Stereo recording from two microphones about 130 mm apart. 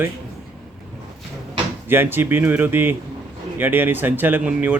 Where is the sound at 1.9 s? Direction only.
15° right (ahead or behind).